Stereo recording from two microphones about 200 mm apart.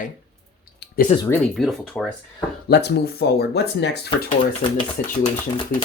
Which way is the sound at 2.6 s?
55° left (ahead or behind).